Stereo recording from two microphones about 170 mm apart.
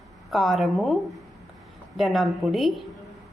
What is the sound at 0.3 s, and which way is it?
Speech, centre (ahead or behind).